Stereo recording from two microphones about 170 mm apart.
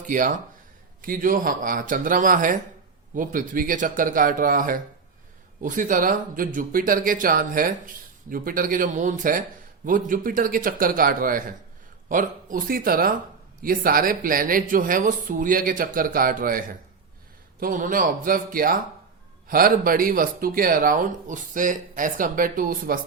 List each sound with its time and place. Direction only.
0.1 s speech: 50° right (ahead or behind)